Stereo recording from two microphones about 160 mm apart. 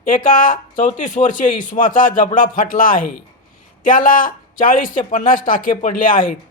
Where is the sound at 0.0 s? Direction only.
60° left (ahead or behind).